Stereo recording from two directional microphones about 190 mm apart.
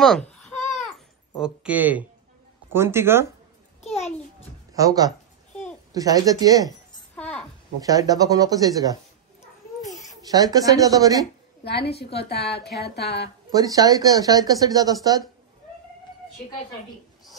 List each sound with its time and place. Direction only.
0.0 s babbling: centre (ahead or behind)
1.4 s speech: 5° right (ahead or behind)
3.8 s babbling: 35° left (ahead or behind)
4.7 s speech: 20° right (ahead or behind)
5.5 s babbling: 5° left (ahead or behind)
5.9 s speech: 20° right (ahead or behind)
7.2 s a sound: 5° left (ahead or behind)
7.8 s speech: 20° right (ahead or behind)
9.8 s babbling: 15° left (ahead or behind)
10.2 s speech: 20° right (ahead or behind)
12.0 s a woman's voice: 60° left (ahead or behind)
13.5 s speech: 20° right (ahead or behind)